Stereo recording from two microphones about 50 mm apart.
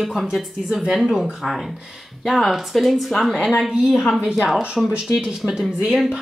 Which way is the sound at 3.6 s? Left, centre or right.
Centre.